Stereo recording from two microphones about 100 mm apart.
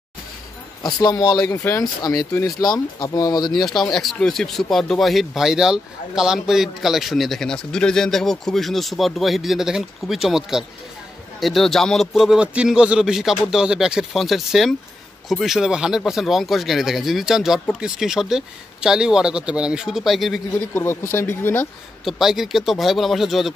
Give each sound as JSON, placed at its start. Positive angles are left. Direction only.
{"t": 0.8, "sound": "speech", "side_deg": 40}
{"t": 3.5, "sound": "speech", "side_deg": 5}
{"t": 20.7, "sound": "speech", "side_deg": 25}
{"t": 22.0, "sound": "speech", "side_deg": -5}